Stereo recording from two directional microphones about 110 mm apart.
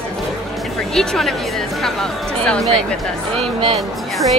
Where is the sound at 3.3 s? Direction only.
65° right (ahead or behind).